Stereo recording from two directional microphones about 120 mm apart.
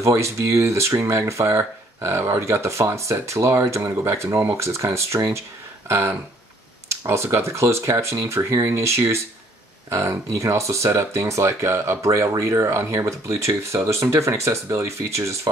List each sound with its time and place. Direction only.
0.0 s speech: 25° right (ahead or behind)